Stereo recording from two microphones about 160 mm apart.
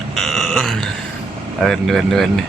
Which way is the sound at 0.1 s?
Centre (ahead or behind).